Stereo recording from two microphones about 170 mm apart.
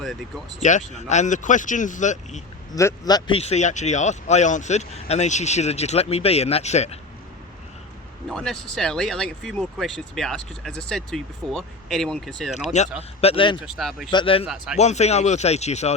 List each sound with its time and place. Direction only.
0.0 s speech: centre (ahead or behind)
0.6 s speech: 45° left (ahead or behind)
2.7 s speech: 20° left (ahead or behind)
3.3 s speech: 40° left (ahead or behind)
8.3 s speech: 5° left (ahead or behind)
12.6 s speech: 40° left (ahead or behind)
13.2 s speech: 30° left (ahead or behind)
13.7 s speech: centre (ahead or behind)
14.1 s speech: 30° left (ahead or behind)
14.4 s speech: 5° right (ahead or behind)
14.8 s speech: 40° left (ahead or behind)